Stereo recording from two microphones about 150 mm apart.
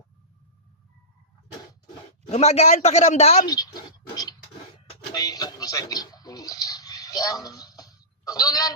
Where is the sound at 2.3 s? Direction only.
45° left (ahead or behind).